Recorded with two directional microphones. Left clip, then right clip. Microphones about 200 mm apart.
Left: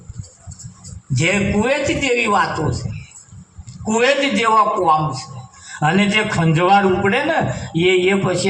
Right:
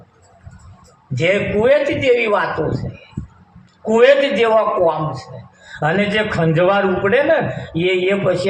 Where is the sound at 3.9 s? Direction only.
35° left (ahead or behind).